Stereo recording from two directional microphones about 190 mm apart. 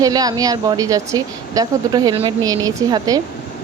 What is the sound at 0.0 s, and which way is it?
Speech, 20° right (ahead or behind).